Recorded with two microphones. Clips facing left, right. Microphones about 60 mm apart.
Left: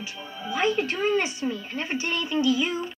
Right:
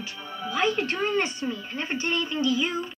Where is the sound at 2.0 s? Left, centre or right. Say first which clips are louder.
Right 3 dB; right.